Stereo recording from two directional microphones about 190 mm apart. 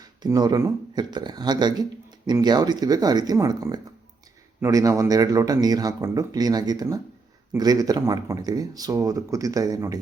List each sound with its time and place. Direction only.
0.0 s speech: 20° right (ahead or behind)